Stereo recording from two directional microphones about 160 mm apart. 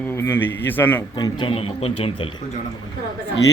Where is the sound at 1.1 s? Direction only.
25° left (ahead or behind).